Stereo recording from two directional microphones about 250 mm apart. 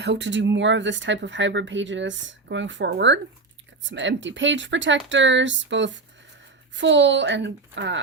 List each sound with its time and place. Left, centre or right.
0.0 s speech: right